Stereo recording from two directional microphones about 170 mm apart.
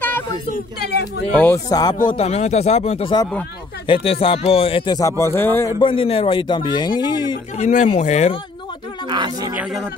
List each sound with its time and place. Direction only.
0.8 s speech: 75° left (ahead or behind)
1.3 s speech: 10° left (ahead or behind)
1.7 s speech: 25° left (ahead or behind)
2.0 s speech: 35° left (ahead or behind); by 5.7 s 15° left (ahead or behind)
5.8 s speech: 30° left (ahead or behind)
7.5 s speech: 45° left (ahead or behind)
9.1 s speech: 25° right (ahead or behind)
9.5 s speech: 5° right (ahead or behind)